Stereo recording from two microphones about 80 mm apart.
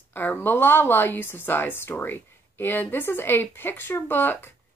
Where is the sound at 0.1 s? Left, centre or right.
Left.